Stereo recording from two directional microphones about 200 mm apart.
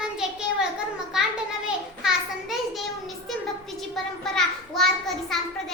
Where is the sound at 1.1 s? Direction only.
5° right (ahead or behind).